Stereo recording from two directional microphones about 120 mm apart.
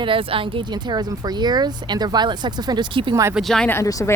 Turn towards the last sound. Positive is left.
turn(degrees=25)  # may be behind; listen again after turning